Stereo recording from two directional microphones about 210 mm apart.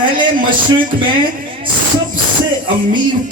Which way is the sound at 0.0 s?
20° right (ahead or behind).